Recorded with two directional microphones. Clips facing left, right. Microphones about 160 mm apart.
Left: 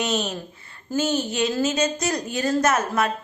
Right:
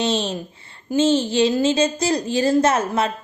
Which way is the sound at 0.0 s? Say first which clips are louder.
Right 3 dB; 30° right (ahead or behind).